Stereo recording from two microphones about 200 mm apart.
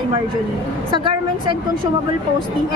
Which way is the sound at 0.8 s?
25° right (ahead or behind).